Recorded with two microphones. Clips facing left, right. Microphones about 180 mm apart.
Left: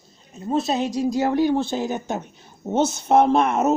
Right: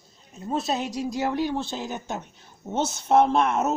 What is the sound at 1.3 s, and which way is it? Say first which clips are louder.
Speech: left 7 dB; 50° left (ahead or behind).